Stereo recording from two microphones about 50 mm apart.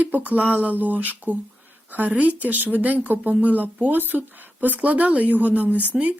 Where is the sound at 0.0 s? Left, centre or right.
Right.